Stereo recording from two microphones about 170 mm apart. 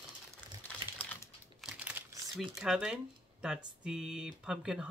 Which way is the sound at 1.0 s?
10° left (ahead or behind).